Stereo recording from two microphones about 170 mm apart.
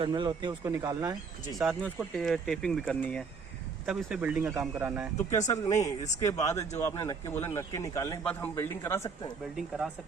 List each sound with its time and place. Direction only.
0.0 s speech: 25° right (ahead or behind)
1.5 s speech: centre (ahead or behind)
3.8 s speech: 5° right (ahead or behind)
5.1 s speech: 45° left (ahead or behind)
6.1 s speech: 20° left (ahead or behind)
9.6 s speech: centre (ahead or behind)